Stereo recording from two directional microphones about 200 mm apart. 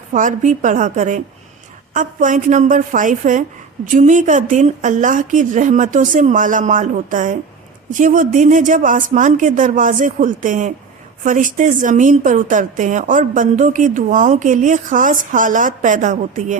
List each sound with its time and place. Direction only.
0.1 s a woman's voice: 40° right (ahead or behind)